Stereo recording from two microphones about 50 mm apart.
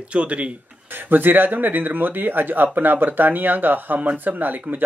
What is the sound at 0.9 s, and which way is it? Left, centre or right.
Speech, right.